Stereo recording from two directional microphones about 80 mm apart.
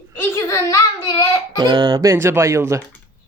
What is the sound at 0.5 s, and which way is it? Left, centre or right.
Child singing, left.